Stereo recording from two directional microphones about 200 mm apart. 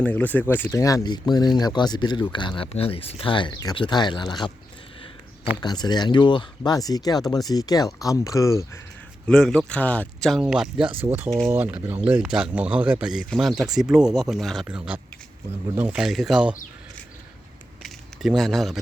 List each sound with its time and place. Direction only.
0.0 s speech: 5° left (ahead or behind)
5.5 s speech: 20° left (ahead or behind)
9.2 s speech: 5° left (ahead or behind)
17.8 s a sound: centre (ahead or behind)